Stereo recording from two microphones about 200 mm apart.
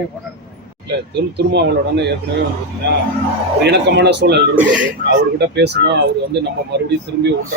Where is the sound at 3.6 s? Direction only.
60° right (ahead or behind).